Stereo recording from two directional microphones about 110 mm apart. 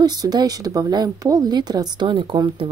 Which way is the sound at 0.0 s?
35° right (ahead or behind).